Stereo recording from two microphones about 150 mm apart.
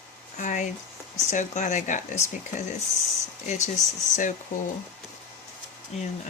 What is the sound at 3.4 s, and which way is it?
Speech, 55° left (ahead or behind).